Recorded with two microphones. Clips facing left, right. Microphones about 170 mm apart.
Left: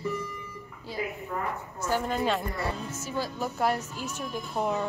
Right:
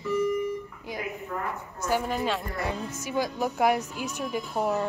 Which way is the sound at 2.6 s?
15° right (ahead or behind).